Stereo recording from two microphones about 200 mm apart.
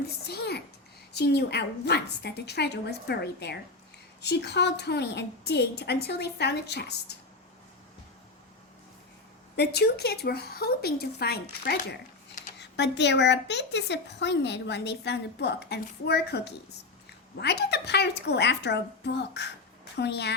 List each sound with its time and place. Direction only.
0.3 s a woman's voice: 55° left (ahead or behind)
9.6 s a woman's voice: 55° left (ahead or behind)